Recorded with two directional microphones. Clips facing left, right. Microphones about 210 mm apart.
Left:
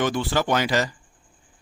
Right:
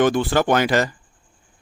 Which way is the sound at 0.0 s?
55° right (ahead or behind).